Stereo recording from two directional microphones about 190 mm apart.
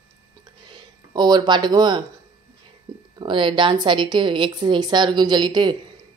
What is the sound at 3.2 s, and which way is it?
Speech, 25° right (ahead or behind).